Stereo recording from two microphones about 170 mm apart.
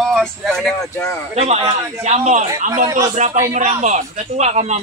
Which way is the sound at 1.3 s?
35° right (ahead or behind).